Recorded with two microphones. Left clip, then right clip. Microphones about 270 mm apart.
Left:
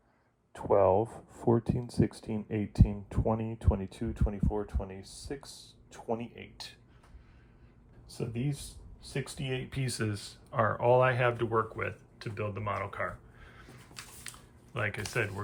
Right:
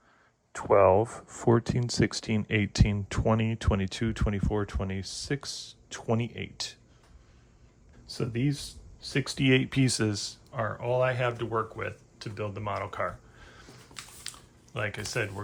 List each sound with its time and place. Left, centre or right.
0.5 s speech: left
4.4 s speech: right
8.0 s speech: right; by 15.4 s centre